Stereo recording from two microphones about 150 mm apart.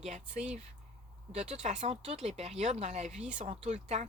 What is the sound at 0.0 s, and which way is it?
Speech, 50° right (ahead or behind).